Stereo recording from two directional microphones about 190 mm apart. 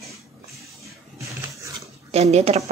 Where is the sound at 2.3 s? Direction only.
35° right (ahead or behind).